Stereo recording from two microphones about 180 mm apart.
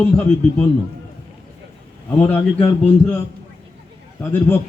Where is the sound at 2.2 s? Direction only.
10° left (ahead or behind).